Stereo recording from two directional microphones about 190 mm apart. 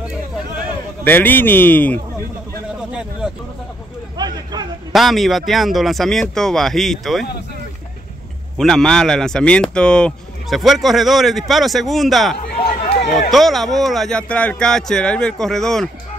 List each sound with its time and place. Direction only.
1.0 s speech: 10° left (ahead or behind)
2.9 s a sound: 5° right (ahead or behind)
4.2 s a sound: 20° right (ahead or behind)
4.9 s speech: centre (ahead or behind)
8.5 s speech: centre (ahead or behind)
12.5 s run: 50° left (ahead or behind)
13.3 s speech: centre (ahead or behind)